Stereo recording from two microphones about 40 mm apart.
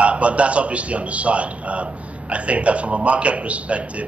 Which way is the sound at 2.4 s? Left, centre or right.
Right.